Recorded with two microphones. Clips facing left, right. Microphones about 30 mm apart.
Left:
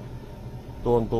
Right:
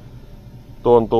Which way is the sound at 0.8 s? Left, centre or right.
Right.